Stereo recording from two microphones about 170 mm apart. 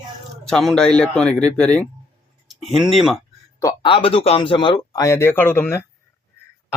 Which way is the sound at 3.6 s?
25° left (ahead or behind).